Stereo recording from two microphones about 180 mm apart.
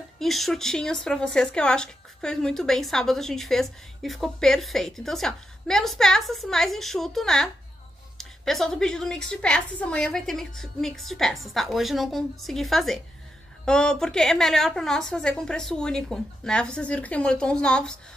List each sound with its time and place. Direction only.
0.2 s speech: centre (ahead or behind)